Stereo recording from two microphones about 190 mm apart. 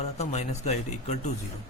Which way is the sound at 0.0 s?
35° left (ahead or behind).